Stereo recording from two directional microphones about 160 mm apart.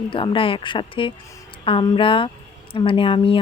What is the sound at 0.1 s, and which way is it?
Speech, 35° left (ahead or behind).